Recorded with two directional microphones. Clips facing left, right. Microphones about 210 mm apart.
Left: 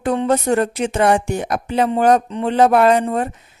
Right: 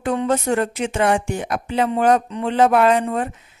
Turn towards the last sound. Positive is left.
turn(degrees=40)  # may be behind; listen again after turning